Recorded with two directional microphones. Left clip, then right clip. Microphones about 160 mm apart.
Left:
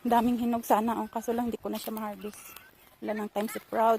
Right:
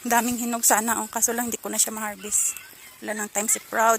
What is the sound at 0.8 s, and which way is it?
Speech, 5° left (ahead or behind).